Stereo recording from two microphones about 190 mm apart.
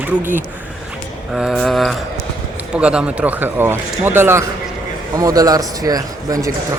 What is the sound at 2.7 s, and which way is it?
A man's voice, 5° right (ahead or behind).